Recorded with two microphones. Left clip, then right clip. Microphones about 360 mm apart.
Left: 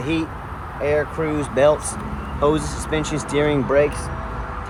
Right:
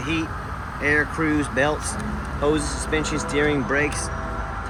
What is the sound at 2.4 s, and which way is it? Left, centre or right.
Speech, centre.